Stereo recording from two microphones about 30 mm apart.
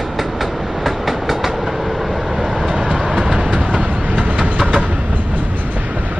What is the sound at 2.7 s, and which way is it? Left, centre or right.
Train, right.